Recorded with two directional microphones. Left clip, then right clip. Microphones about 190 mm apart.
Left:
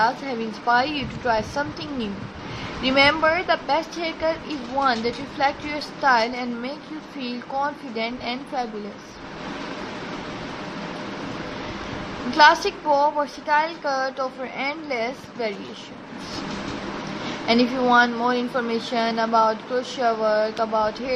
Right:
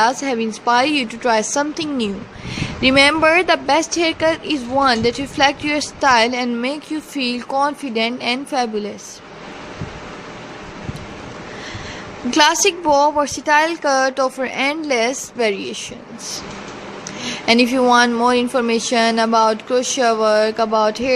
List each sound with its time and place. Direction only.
0.0 s a woman's voice: 50° right (ahead or behind)
12.3 s a woman's voice: 55° right (ahead or behind)
17.4 s a woman's voice: 50° right (ahead or behind)